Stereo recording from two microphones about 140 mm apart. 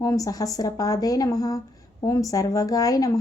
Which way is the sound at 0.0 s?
25° left (ahead or behind).